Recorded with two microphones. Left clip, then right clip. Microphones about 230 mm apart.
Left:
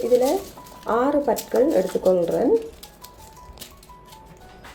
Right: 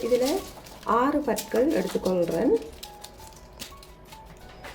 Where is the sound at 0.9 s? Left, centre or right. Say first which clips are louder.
Left 3 dB; centre.